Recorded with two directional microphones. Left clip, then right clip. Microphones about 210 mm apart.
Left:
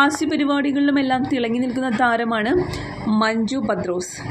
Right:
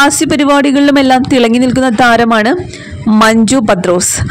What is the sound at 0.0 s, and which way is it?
Speech, 50° right (ahead or behind).